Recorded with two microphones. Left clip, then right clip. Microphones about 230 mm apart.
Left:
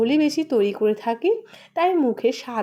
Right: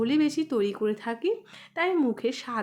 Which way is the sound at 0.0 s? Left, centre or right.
Centre.